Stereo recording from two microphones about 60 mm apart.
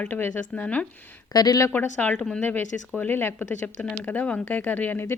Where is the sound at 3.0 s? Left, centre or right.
Left.